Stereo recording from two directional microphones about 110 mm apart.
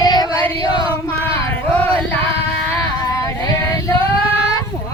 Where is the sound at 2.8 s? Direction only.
30° left (ahead or behind).